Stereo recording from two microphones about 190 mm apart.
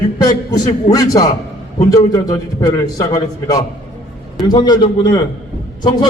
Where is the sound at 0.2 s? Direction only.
20° left (ahead or behind).